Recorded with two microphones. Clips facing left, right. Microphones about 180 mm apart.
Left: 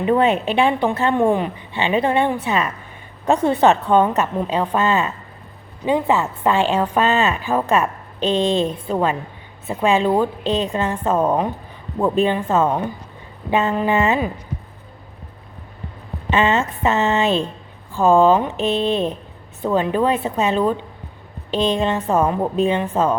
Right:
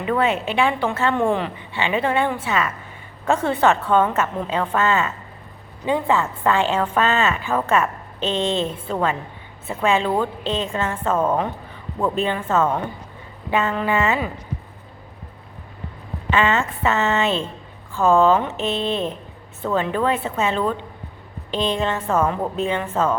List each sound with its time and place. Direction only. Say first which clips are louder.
0.0 s a woman's voice: left 4 dB; 25° left (ahead or behind)
16.3 s a woman's voice: left 2 dB; 20° left (ahead or behind)